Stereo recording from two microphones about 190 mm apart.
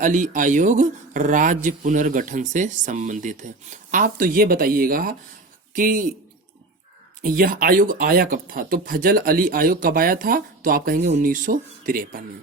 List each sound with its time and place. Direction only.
0.0 s speech: 40° right (ahead or behind)
7.2 s speech: 50° right (ahead or behind)